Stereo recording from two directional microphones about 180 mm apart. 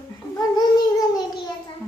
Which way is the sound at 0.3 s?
20° left (ahead or behind).